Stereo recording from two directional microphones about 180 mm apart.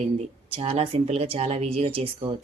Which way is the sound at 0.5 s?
35° right (ahead or behind).